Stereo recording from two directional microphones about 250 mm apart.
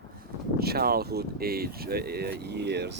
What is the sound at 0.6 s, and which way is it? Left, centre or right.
Speech, right.